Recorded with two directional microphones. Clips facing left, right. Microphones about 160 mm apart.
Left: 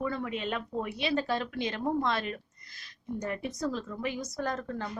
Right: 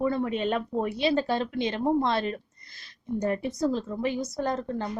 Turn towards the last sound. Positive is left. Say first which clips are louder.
# right 5 dB
turn(degrees=-25)  # may be behind; listen again after turning